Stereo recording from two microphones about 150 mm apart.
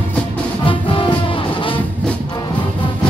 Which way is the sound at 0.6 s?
35° left (ahead or behind).